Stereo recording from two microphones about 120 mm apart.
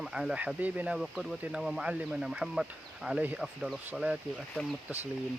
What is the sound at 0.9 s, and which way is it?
Speech, centre (ahead or behind).